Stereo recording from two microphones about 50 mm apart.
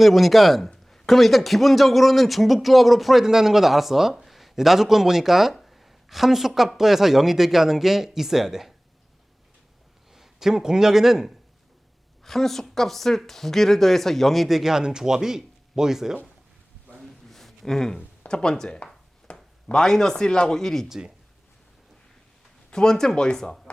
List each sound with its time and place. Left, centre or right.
0.0 s speech: centre
10.1 s speech: centre
12.2 s speech: centre
17.0 s a sound: centre
18.3 s speech: centre
19.3 s a sound: left
19.7 s speech: centre
20.8 s speech: centre
22.7 s speech: centre